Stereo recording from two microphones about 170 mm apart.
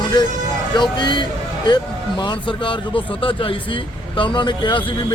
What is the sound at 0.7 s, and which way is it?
A man's voice, 25° left (ahead or behind).